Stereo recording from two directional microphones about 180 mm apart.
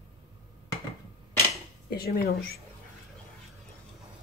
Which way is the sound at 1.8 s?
60° left (ahead or behind).